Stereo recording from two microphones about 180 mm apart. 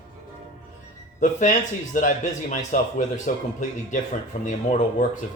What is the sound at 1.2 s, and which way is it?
Speech, 45° left (ahead or behind).